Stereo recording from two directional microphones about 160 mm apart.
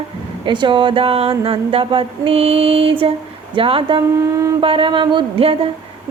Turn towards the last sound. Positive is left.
turn(degrees=-30)  # may be behind; listen again after turning